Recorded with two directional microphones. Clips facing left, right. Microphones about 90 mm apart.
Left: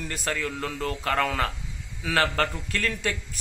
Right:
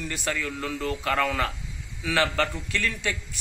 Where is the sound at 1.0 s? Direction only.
30° left (ahead or behind).